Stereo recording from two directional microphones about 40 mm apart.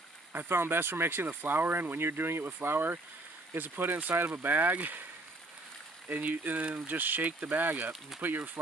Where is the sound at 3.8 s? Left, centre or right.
Right.